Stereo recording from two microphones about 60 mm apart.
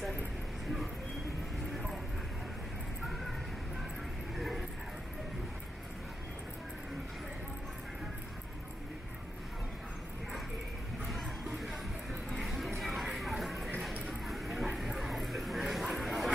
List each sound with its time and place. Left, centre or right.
4.4 s dog: centre
11.1 s music: centre
14.2 s a sound: centre
14.7 s bow-wow: centre